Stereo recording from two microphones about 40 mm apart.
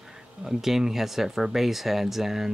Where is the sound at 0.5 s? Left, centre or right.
Centre.